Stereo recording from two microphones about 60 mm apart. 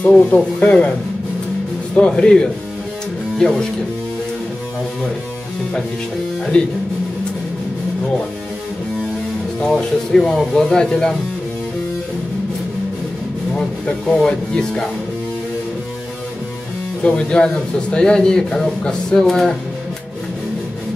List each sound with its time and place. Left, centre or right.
0.0 s speech: left
2.0 s speech: centre
6.5 s speech: centre
9.7 s speech: centre
13.6 s speech: centre
17.0 s speech: centre